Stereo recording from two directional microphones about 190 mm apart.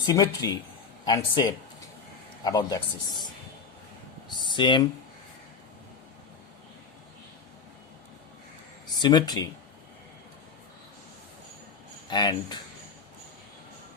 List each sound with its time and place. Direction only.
0.0 s speech: 20° left (ahead or behind)
4.4 s speech: 25° left (ahead or behind)
9.0 s speech: 20° left (ahead or behind)
12.1 s speech: 20° left (ahead or behind)